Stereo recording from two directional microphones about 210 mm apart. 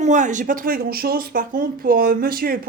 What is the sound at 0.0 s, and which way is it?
Speech, 35° right (ahead or behind).